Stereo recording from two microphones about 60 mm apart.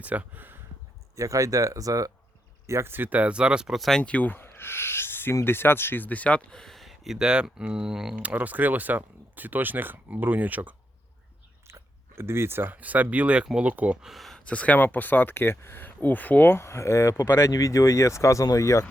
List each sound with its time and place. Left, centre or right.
0.0 s speech: right
1.1 s speech: right
2.6 s speech: right
2.9 s speech: right; by 3.8 s centre
3.8 s speech: centre
4.0 s speech: left
4.4 s owl: left
5.5 s speech: left
6.5 s speech: centre
8.2 s speech: right
11.7 s speech: right
14.0 s speech: centre
14.3 s speech: left
17.5 s speech: left